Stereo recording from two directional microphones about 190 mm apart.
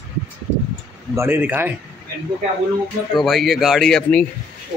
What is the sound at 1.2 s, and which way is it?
Speech, 10° right (ahead or behind).